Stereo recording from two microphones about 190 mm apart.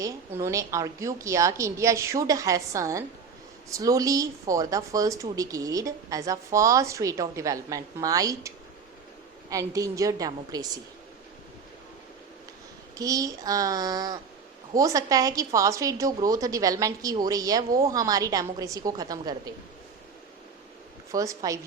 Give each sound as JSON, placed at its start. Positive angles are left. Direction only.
{"t": 0.0, "sound": "a woman's voice", "side_deg": -15}
{"t": 13.0, "sound": "a woman's voice", "side_deg": -20}
{"t": 21.1, "sound": "a woman's voice", "side_deg": -15}